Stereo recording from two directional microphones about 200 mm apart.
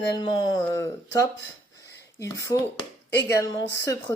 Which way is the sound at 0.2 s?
20° left (ahead or behind).